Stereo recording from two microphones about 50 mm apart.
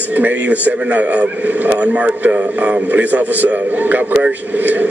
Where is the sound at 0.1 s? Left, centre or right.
Right.